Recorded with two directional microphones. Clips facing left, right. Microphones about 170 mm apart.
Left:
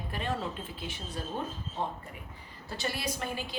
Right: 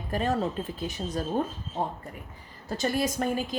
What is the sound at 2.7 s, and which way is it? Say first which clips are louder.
Speech: right 8 dB; 45° right (ahead or behind).